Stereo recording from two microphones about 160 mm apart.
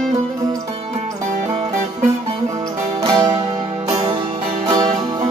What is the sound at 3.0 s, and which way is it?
Music, 25° right (ahead or behind).